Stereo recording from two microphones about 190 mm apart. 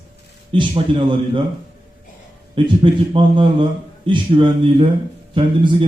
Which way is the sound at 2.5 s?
25° right (ahead or behind).